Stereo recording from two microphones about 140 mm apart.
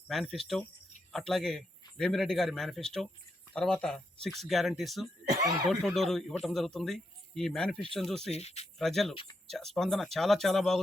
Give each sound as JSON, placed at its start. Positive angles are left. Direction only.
{"t": 0.1, "sound": "speech", "side_deg": 0}
{"t": 8.3, "sound": "speech", "side_deg": 50}
{"t": 8.8, "sound": "speech", "side_deg": 0}